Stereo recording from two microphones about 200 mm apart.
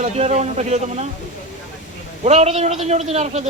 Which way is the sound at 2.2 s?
35° right (ahead or behind).